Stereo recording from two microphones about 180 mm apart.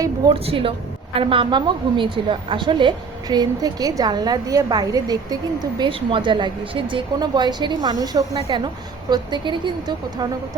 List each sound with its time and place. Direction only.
0.0 s a woman's voice: 30° right (ahead or behind)